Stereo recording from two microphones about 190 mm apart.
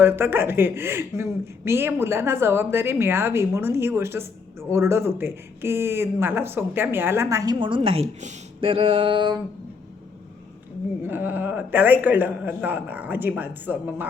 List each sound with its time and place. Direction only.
0.0 s speech: 10° right (ahead or behind)
7.6 s speech: 30° right (ahead or behind)
11.0 s speech: 10° right (ahead or behind)